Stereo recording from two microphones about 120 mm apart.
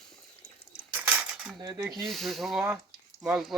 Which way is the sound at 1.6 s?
30° right (ahead or behind).